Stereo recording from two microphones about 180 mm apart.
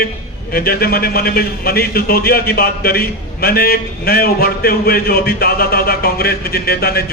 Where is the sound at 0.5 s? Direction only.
55° left (ahead or behind).